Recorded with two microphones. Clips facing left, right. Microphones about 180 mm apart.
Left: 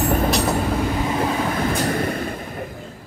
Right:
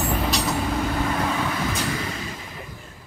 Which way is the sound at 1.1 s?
25° left (ahead or behind).